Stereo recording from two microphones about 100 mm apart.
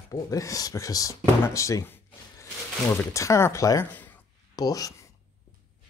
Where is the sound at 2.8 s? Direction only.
30° left (ahead or behind).